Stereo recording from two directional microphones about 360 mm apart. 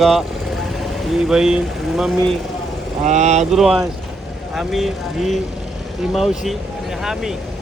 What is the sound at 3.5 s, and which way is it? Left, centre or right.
Speech, centre.